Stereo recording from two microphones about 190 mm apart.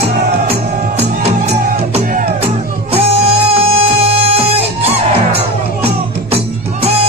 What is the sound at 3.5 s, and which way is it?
Music, 30° right (ahead or behind).